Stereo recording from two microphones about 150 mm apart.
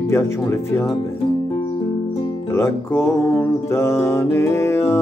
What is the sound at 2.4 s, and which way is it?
Music, 15° left (ahead or behind).